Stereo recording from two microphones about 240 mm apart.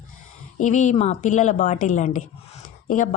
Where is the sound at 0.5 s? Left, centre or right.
Left.